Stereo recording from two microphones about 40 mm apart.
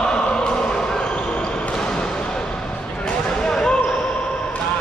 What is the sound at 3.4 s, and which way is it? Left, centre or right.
Basketball bounce, centre.